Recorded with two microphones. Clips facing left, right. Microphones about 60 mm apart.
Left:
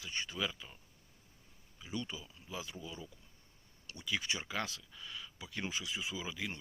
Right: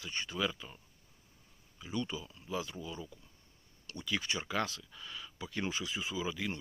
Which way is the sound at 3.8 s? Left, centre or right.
Centre.